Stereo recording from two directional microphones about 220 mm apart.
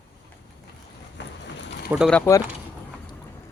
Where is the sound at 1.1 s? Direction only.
55° left (ahead or behind).